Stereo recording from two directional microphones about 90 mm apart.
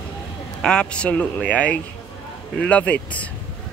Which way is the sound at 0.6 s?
10° left (ahead or behind).